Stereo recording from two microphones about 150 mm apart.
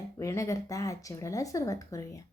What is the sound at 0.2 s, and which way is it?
A woman's voice, 20° left (ahead or behind).